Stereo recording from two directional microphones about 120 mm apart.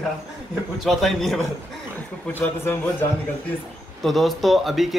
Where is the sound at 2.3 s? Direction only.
20° left (ahead or behind).